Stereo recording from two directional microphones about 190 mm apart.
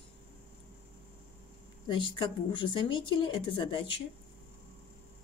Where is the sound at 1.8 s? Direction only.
25° left (ahead or behind).